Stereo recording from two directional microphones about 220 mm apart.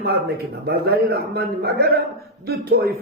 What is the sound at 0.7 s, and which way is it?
A man's voice, 45° right (ahead or behind).